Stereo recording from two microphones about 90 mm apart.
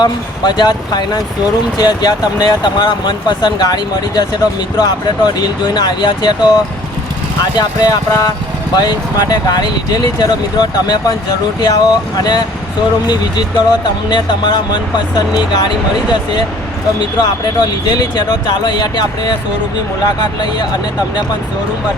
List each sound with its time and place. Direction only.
0.0 s speech: 50° left (ahead or behind)
17.0 s speech: 50° left (ahead or behind)